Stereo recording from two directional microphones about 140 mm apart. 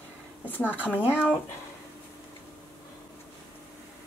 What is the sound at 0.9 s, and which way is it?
Speech, 10° right (ahead or behind).